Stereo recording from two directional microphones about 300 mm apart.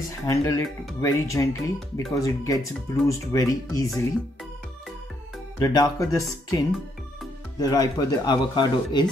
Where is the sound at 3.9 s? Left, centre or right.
Centre.